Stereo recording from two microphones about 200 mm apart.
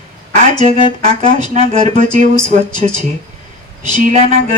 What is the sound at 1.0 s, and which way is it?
Speech, 40° right (ahead or behind).